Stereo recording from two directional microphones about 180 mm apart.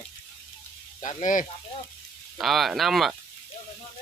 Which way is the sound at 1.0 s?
45° left (ahead or behind).